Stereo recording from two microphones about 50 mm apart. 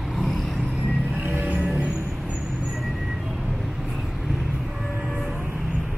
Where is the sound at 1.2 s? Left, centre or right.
Right.